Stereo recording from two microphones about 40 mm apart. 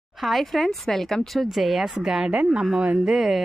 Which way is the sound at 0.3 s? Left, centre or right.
Centre.